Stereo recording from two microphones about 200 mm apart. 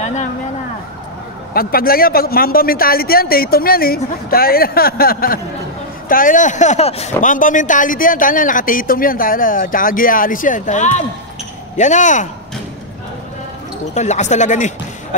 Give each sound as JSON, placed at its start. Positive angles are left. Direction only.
{"t": 0.0, "sound": "a sound", "side_deg": 35}
{"t": 1.5, "sound": "a man's voice", "side_deg": 50}
{"t": 13.9, "sound": "speech", "side_deg": 35}